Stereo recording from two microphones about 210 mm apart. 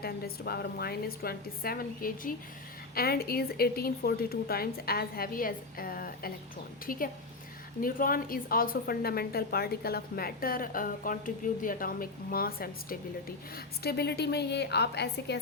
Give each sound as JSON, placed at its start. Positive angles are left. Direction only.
{"t": 0.0, "sound": "a woman's voice", "side_deg": 45}
{"t": 7.8, "sound": "a woman's voice", "side_deg": 40}